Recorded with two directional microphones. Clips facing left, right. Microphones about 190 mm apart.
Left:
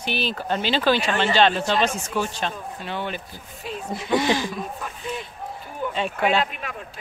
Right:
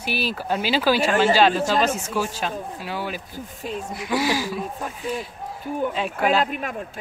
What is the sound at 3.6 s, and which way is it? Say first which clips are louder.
Speech: right 3 dB; 45° right (ahead or behind).